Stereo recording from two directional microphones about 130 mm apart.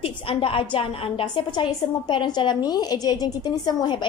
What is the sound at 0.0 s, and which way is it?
A woman's voice, 45° left (ahead or behind).